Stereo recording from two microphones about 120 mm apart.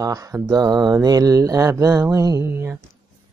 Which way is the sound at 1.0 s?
30° right (ahead or behind).